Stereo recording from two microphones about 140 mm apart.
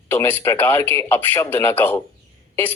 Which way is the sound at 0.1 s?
15° left (ahead or behind).